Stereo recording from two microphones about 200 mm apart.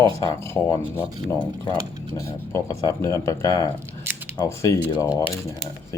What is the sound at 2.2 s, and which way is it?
Speech, 15° left (ahead or behind).